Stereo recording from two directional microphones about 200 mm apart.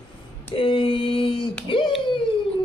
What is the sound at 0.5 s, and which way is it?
Female singing, 25° left (ahead or behind).